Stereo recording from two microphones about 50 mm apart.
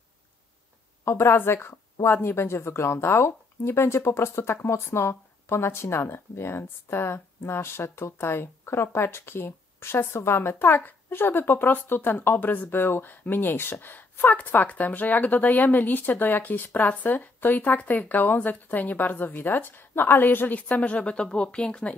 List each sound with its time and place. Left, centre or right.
1.0 s a woman's voice: left; by 21.9 s centre